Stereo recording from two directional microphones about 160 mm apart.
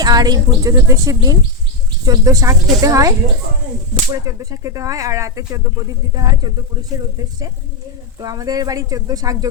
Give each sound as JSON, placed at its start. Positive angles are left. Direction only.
{"t": 0.0, "sound": "speech", "side_deg": -25}
{"t": 4.1, "sound": "speech", "side_deg": -20}